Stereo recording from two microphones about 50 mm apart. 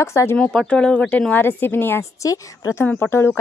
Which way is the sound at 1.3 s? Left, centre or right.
Left.